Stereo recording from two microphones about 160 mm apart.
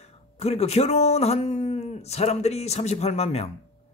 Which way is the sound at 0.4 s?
40° left (ahead or behind).